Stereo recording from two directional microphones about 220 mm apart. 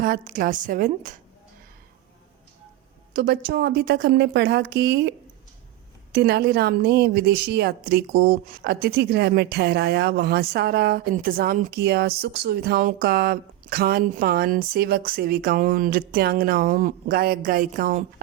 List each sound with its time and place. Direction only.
0.0 s a woman's voice: 40° right (ahead or behind)
3.1 s speech: 45° right (ahead or behind)
6.1 s speech: 45° right (ahead or behind)